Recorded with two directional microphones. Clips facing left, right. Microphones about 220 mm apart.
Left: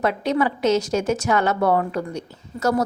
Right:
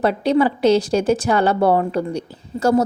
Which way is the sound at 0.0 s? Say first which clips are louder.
Right 4 dB; 30° right (ahead or behind).